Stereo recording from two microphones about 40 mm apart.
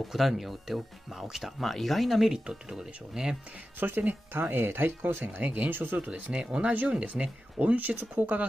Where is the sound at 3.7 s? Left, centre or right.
Right.